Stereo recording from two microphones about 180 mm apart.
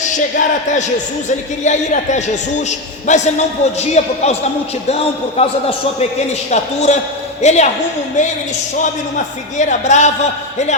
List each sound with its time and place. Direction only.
0.0 s a man's voice: 45° left (ahead or behind)
5.4 s a man's voice: 35° left (ahead or behind)
8.8 s a man's voice: 45° left (ahead or behind)